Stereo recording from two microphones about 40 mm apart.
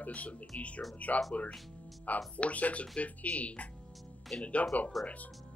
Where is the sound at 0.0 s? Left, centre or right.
Left.